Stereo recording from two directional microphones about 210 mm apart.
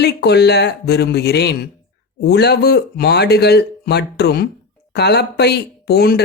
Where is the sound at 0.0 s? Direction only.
50° left (ahead or behind).